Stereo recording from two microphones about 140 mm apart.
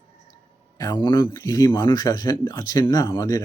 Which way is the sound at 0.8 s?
30° left (ahead or behind).